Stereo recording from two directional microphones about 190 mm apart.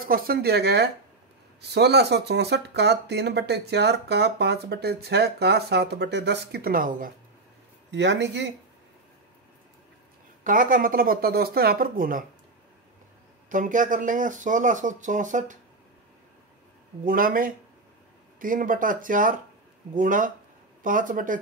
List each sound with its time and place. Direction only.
0.0 s speech: 50° right (ahead or behind)
7.9 s speech: 65° right (ahead or behind)
10.4 s speech: 45° right (ahead or behind)
13.5 s speech: 45° right (ahead or behind)
17.0 s speech: 50° right (ahead or behind)